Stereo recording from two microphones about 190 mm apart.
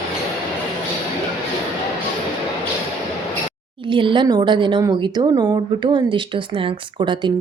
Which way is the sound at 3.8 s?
25° right (ahead or behind).